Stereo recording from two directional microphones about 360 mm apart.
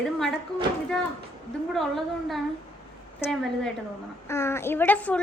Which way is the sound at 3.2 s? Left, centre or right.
Centre.